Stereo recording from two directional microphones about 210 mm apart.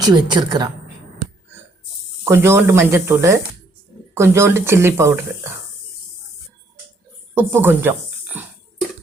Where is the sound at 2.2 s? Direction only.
10° right (ahead or behind).